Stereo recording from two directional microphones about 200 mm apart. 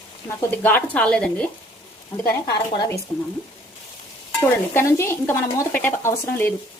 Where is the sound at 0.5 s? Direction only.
10° left (ahead or behind).